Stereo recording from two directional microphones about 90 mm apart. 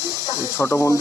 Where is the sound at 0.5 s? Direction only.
30° left (ahead or behind).